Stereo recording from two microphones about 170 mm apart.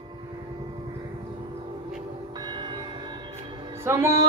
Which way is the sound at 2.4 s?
25° right (ahead or behind).